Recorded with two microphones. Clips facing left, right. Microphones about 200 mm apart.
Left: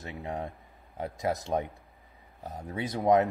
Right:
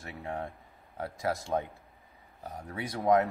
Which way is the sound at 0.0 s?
20° left (ahead or behind).